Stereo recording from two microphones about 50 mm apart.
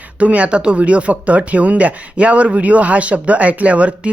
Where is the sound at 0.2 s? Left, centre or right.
Right.